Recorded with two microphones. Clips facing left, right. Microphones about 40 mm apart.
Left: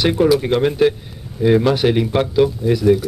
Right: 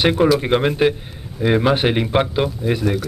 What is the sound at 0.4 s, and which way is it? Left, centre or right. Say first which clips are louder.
Speech: left 1 dB; right.